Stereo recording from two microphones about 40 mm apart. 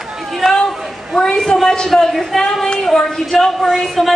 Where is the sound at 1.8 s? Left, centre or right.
Centre.